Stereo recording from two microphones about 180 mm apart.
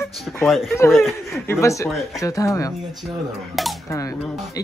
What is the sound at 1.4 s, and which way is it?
Speech, 15° left (ahead or behind).